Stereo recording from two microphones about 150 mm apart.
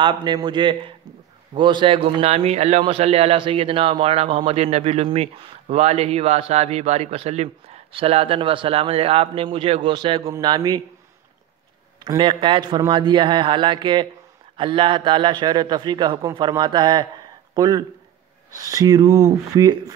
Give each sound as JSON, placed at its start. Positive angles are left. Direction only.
{"t": 0.0, "sound": "a man's voice", "side_deg": -30}
{"t": 12.2, "sound": "a man's voice", "side_deg": -35}